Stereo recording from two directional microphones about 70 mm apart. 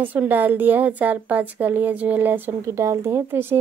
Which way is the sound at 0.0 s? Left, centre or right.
Right.